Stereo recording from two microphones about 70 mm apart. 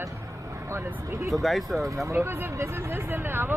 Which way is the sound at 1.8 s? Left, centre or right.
Right.